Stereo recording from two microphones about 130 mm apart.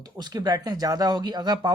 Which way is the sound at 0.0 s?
30° right (ahead or behind).